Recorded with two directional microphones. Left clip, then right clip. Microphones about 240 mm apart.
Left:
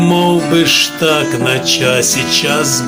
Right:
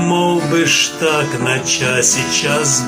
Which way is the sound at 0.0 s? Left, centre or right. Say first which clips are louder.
Left 3 dB; left.